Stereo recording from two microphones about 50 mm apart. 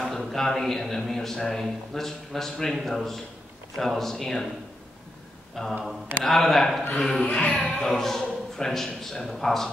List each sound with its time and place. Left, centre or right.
0.0 s a man's voice: centre
5.6 s a man's voice: centre
7.3 s music: left
7.6 s a man's voice: centre